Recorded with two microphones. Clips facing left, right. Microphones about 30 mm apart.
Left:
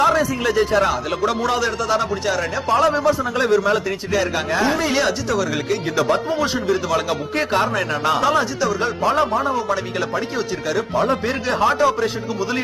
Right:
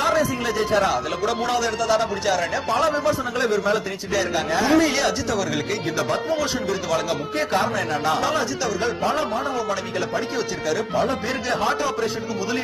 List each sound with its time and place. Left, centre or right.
0.4 s speech: left
4.1 s a man's voice: centre
7.3 s speech: left
9.0 s music: left